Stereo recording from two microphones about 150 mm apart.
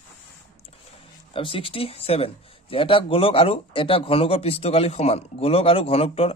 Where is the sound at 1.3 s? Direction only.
35° left (ahead or behind).